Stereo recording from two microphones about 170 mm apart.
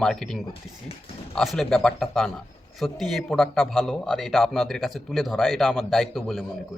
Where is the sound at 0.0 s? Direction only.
5° left (ahead or behind).